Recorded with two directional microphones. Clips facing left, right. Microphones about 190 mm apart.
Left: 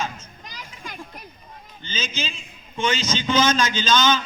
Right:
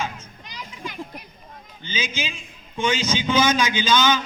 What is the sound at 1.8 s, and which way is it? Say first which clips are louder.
A man's voice: right 1 dB; 15° right (ahead or behind).